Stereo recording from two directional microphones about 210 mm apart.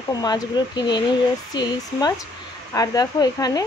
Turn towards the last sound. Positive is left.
turn(degrees=20)  # may be behind; listen again after turning